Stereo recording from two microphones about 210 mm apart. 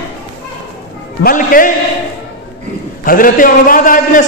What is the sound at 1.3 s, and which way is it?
Speech, 40° left (ahead or behind).